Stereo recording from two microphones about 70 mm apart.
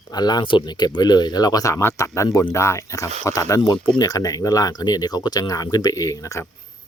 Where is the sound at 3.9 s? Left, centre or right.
Left.